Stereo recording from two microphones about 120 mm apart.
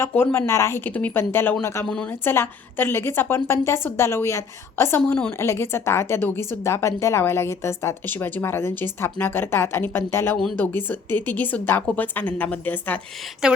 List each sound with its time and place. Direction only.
0.0 s a woman's voice: 15° left (ahead or behind)
1.9 s a woman's voice: 10° left (ahead or behind)
2.3 s a woman's voice: 20° left (ahead or behind)
13.4 s speech: 5° right (ahead or behind)